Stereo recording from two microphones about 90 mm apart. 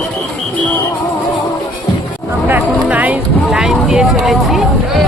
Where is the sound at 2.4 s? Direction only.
20° right (ahead or behind).